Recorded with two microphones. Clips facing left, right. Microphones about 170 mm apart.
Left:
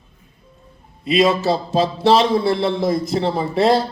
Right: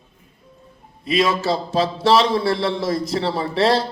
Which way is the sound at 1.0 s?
25° left (ahead or behind).